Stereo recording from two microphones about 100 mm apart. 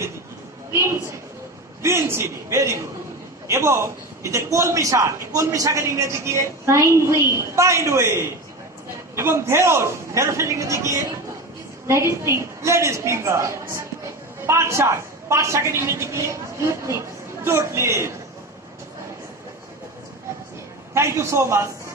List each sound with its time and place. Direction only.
0.7 s a man's voice: 30° right (ahead or behind)
20.9 s a man's voice: 25° right (ahead or behind)